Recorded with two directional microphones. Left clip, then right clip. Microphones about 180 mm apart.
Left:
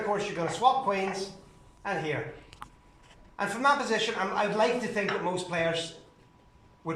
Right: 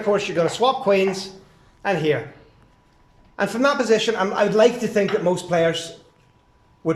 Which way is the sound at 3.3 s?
65° right (ahead or behind).